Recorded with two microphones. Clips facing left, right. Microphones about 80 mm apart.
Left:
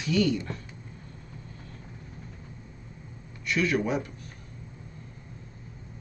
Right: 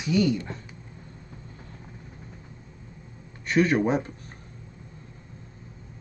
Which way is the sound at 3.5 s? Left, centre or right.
Right.